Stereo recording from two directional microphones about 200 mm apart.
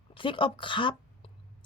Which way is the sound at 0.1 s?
25° left (ahead or behind).